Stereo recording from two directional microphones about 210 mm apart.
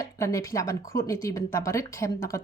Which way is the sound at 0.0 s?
15° left (ahead or behind).